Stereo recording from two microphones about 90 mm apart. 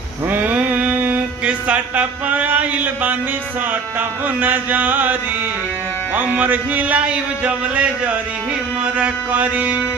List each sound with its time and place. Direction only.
0.3 s a sound: 20° right (ahead or behind)
4.4 s mantra: 20° right (ahead or behind)
6.1 s speech: 20° right (ahead or behind)